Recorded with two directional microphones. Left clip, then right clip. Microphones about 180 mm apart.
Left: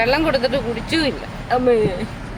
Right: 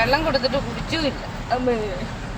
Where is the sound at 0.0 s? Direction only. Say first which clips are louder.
Left 2 dB; 60° left (ahead or behind).